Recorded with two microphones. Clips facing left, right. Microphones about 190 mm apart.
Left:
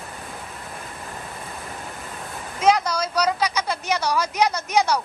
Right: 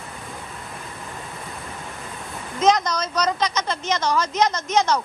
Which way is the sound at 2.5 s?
10° left (ahead or behind).